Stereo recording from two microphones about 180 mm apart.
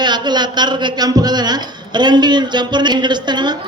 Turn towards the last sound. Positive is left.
turn(degrees=-25)  # may be behind; listen again after turning